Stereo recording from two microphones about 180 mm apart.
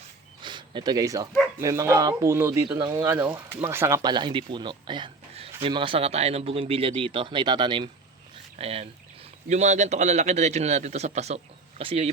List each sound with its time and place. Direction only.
0.4 s a man's voice: 25° right (ahead or behind)